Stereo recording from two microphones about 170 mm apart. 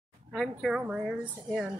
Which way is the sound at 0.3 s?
Centre (ahead or behind).